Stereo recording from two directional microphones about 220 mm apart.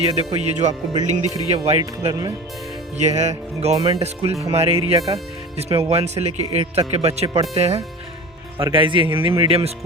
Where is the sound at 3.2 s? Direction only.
30° right (ahead or behind).